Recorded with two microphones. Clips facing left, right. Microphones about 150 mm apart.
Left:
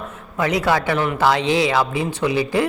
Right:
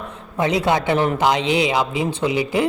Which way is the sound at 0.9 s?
35° right (ahead or behind).